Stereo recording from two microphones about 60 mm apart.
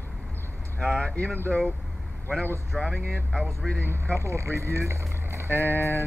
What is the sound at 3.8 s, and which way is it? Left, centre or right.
Speech, right.